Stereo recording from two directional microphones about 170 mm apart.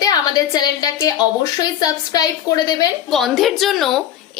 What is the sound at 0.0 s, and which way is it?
A woman's voice, 25° left (ahead or behind).